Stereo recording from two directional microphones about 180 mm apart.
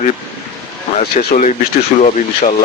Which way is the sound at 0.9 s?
40° left (ahead or behind).